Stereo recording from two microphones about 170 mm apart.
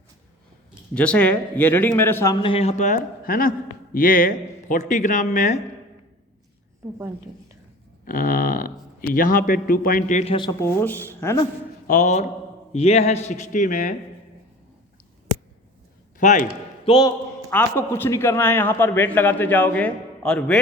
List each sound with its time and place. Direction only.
0.9 s a man's voice: 5° left (ahead or behind)
2.3 s a man's voice: 30° left (ahead or behind); by 5.5 s 45° left (ahead or behind)
8.0 s a man's voice: 60° left (ahead or behind)
10.6 s a man's voice: 15° left (ahead or behind)
11.9 s a man's voice: 50° left (ahead or behind)
12.7 s a man's voice: 40° left (ahead or behind)
16.1 s a man's voice: 45° left (ahead or behind)
16.8 s speech: 25° left (ahead or behind)
17.5 s a man's voice: 10° left (ahead or behind)